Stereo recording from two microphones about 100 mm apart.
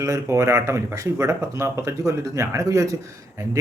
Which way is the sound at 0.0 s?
30° right (ahead or behind).